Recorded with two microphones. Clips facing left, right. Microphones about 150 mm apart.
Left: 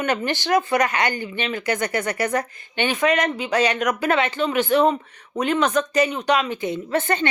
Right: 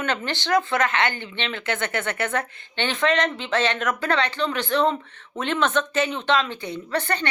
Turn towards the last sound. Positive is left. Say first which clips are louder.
# left 4 dB
turn(degrees=15)  # may be behind; listen again after turning